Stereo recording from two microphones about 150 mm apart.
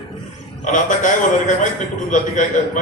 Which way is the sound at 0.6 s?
60° left (ahead or behind).